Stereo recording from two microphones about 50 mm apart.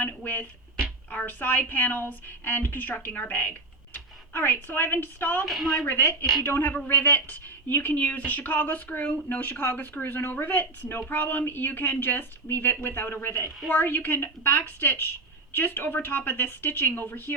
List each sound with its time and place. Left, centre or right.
0.0 s a woman's voice: left
10.2 s a woman's voice: left
10.4 s a woman's voice: left